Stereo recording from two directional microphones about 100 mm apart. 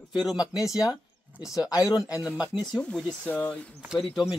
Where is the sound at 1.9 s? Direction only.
40° left (ahead or behind).